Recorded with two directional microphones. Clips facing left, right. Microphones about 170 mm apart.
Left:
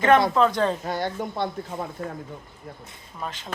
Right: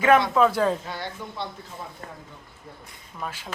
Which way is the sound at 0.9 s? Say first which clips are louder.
Left 7 dB; 45° left (ahead or behind).